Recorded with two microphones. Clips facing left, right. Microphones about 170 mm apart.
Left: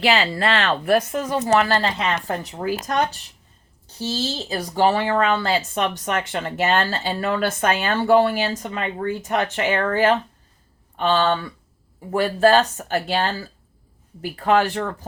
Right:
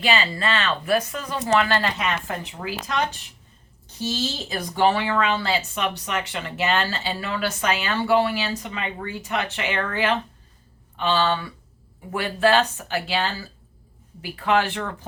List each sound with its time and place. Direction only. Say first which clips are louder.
0.0 s speech: left 4 dB; 75° left (ahead or behind); by 3.0 s 45° left (ahead or behind)
4.0 s speech: left 1 dB; 30° left (ahead or behind)